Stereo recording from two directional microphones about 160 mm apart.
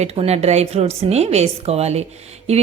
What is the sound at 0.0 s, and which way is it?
A woman's voice, 40° right (ahead or behind).